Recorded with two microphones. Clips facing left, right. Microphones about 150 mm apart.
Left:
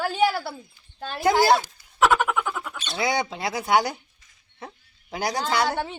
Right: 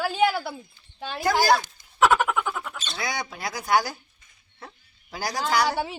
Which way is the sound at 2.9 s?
25° left (ahead or behind).